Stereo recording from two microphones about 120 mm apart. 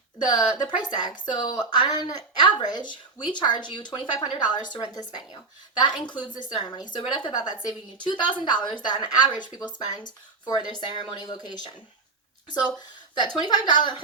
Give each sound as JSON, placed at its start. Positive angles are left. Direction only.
{"t": 0.3, "sound": "a woman's voice", "side_deg": 40}
{"t": 12.7, "sound": "a woman's voice", "side_deg": 35}